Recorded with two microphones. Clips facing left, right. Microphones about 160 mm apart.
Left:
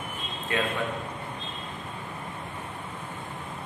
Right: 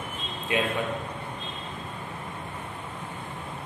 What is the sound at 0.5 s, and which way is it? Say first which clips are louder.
Speech: right 2 dB; 15° right (ahead or behind).